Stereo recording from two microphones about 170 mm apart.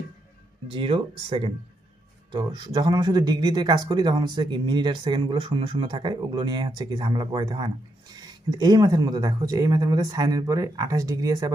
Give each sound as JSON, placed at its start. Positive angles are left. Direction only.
{"t": 0.7, "sound": "speech", "side_deg": -30}